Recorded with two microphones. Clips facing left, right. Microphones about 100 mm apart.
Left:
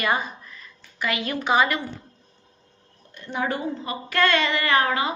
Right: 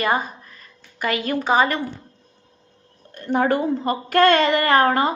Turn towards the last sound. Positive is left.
turn(degrees=-45)  # may be behind; listen again after turning